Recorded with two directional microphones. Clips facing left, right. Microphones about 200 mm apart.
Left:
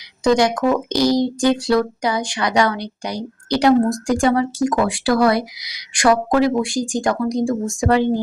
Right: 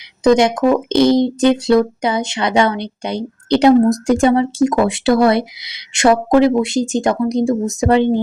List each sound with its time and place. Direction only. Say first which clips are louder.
0.3 s speech: right 4 dB; 20° right (ahead or behind)